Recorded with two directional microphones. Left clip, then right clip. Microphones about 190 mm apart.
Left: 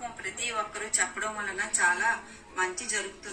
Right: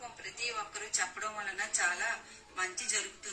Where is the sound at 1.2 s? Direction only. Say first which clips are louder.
Left 5 dB; 20° right (ahead or behind).